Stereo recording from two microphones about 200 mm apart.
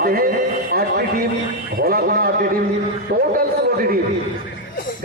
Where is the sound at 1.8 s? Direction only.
50° right (ahead or behind).